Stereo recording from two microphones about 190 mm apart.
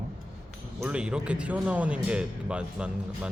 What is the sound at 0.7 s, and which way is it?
Speech, 5° right (ahead or behind).